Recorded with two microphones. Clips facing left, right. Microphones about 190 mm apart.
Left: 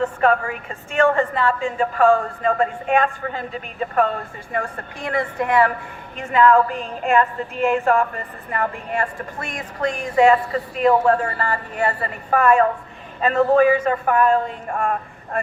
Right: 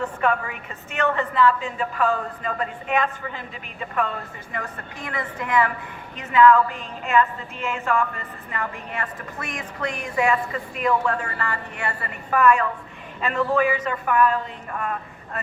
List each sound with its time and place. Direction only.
0.2 s a woman's voice: 40° left (ahead or behind)